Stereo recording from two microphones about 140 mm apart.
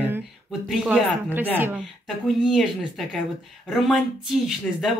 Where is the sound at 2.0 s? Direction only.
Centre (ahead or behind).